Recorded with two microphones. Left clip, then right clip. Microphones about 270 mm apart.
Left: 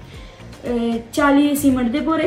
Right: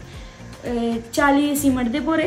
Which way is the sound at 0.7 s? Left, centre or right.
Centre.